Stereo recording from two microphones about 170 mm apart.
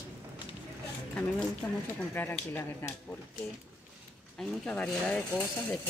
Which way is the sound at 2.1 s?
10° left (ahead or behind).